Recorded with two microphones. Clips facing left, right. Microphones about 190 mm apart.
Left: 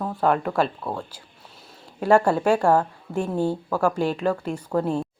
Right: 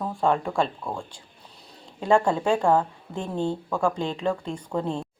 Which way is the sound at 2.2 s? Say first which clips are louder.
Left 2 dB; 10° left (ahead or behind).